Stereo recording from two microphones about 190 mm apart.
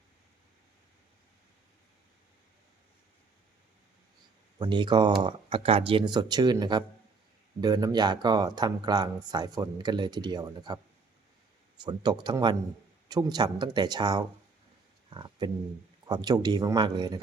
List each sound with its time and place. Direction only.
4.5 s speech: 25° right (ahead or behind)
11.8 s speech: 20° right (ahead or behind)